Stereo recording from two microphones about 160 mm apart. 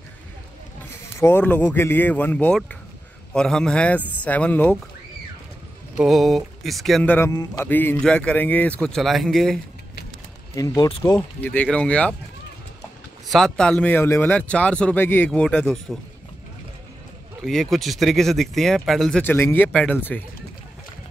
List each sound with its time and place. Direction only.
1.2 s a man's voice: 15° left (ahead or behind)
5.9 s speech: centre (ahead or behind)
10.5 s a man's voice: 20° left (ahead or behind)
13.3 s a man's voice: 5° left (ahead or behind)
17.4 s speech: centre (ahead or behind)